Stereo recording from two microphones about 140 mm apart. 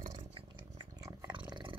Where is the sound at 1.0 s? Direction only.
25° right (ahead or behind).